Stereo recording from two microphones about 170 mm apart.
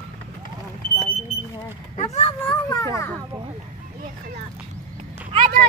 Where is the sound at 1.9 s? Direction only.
40° left (ahead or behind).